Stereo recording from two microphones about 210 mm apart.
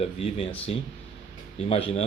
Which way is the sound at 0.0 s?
25° left (ahead or behind).